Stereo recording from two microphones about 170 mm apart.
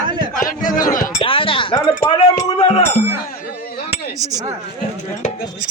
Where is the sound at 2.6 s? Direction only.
35° left (ahead or behind).